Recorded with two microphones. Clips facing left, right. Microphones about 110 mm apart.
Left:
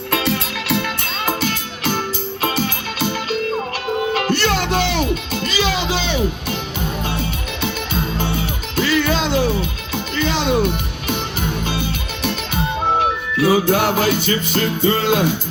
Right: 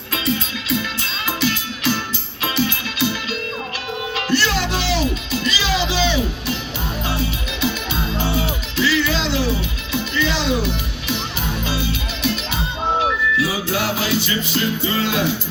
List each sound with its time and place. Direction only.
0.1 s music: 65° left (ahead or behind)
1.2 s music: 50° left (ahead or behind)
8.2 s music: 50° left (ahead or behind)
13.3 s music: 50° left (ahead or behind)